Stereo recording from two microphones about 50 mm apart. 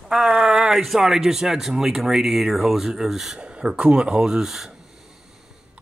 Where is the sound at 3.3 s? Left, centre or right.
Centre.